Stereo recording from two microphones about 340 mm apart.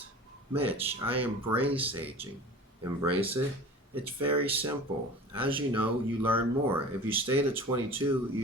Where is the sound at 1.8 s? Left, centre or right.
Centre.